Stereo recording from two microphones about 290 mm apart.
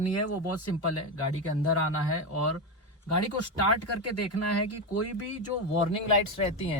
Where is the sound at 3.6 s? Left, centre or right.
Left.